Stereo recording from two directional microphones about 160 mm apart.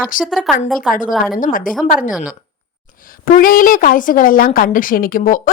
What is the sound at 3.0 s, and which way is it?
A woman's voice, 60° left (ahead or behind).